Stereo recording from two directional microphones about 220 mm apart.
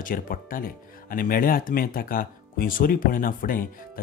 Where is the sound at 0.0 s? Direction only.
40° left (ahead or behind).